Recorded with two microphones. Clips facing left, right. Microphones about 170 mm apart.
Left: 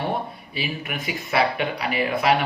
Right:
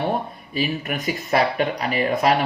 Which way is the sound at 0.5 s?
40° right (ahead or behind).